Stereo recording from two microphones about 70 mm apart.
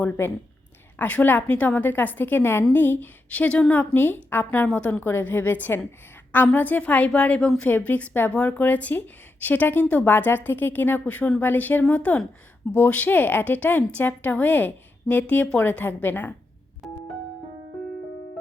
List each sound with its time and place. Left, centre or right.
0.2 s a woman's voice: left
5.0 s a woman's voice: left
16.8 s music: centre